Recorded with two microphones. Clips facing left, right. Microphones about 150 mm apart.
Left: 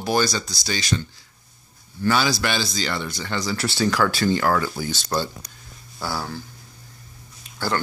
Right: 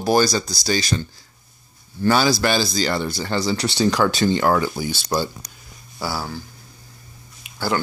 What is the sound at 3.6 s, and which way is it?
Speech, 20° right (ahead or behind).